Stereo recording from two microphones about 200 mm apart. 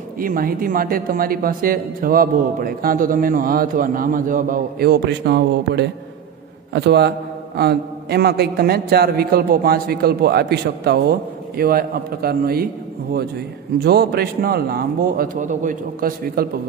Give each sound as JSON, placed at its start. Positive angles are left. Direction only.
{"t": 0.2, "sound": "a man's voice", "side_deg": -45}
{"t": 13.8, "sound": "a man's voice", "side_deg": -50}